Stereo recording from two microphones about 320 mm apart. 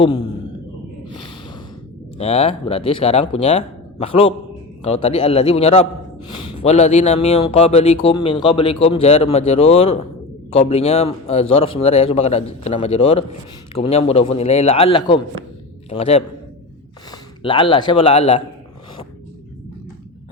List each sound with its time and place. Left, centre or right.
0.0 s a man's voice: centre
1.0 s snort: centre
2.1 s a man's voice: centre